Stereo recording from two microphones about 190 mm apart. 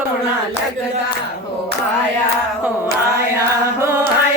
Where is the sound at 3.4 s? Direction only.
15° right (ahead or behind).